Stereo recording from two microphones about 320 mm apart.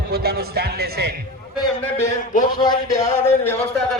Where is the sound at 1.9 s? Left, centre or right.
Left.